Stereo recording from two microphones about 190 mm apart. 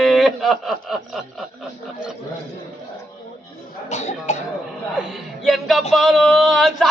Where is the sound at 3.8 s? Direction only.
35° left (ahead or behind).